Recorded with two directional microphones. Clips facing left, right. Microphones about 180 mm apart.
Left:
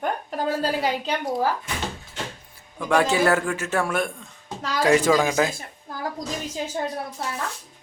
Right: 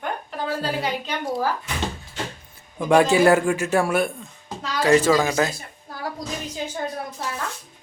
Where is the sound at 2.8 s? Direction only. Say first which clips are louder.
Right 4 dB; 15° right (ahead or behind).